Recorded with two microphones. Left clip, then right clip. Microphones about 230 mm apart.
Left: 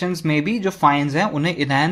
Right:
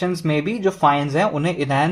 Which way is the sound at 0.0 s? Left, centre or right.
Left.